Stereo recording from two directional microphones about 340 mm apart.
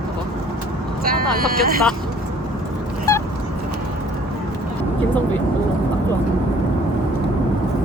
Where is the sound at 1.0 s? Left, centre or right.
Right.